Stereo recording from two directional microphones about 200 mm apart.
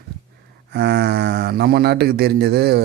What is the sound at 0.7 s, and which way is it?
Speech, 55° right (ahead or behind).